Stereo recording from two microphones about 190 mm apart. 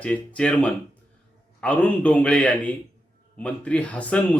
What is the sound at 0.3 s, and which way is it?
Speech, 5° left (ahead or behind).